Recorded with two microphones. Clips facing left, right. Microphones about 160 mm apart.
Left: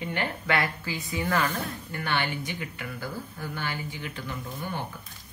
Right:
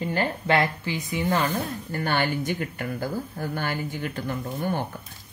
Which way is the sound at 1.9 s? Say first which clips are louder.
Right 5 dB; 40° right (ahead or behind).